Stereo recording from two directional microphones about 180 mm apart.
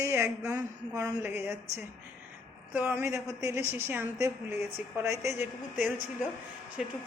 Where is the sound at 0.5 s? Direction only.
20° right (ahead or behind).